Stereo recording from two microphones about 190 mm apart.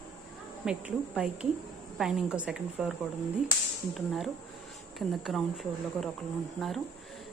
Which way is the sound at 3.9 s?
Centre (ahead or behind).